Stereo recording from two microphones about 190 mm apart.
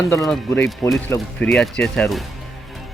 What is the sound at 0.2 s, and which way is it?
A man's voice, 5° left (ahead or behind).